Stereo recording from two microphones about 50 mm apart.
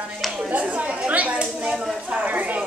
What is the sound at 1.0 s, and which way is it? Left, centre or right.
Speech, right.